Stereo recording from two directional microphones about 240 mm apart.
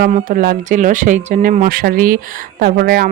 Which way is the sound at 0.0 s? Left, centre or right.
Right.